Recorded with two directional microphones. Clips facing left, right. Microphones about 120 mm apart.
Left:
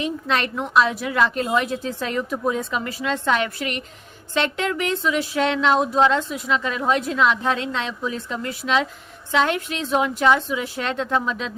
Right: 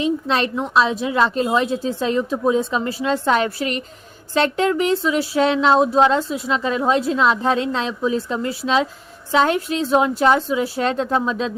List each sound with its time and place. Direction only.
0.3 s a woman's voice: 30° right (ahead or behind)